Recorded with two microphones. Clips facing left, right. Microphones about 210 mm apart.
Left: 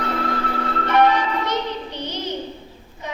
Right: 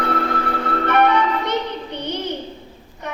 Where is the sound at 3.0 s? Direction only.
60° right (ahead or behind).